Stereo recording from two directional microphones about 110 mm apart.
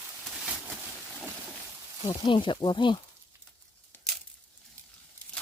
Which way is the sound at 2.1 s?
45° left (ahead or behind).